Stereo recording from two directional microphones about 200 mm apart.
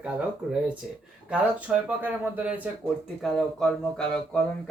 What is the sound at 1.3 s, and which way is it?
Speech, 10° right (ahead or behind).